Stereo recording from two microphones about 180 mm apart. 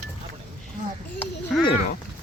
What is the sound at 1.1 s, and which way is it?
Speech, 5° left (ahead or behind).